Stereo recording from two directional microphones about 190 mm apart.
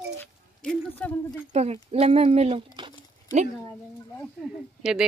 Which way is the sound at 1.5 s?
35° right (ahead or behind).